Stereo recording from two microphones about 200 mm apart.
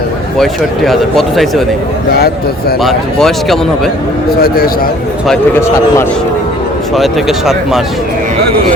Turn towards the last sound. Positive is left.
turn(degrees=0)  # may be behind; listen again after turning